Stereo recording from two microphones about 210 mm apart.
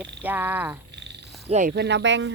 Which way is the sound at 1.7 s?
55° right (ahead or behind).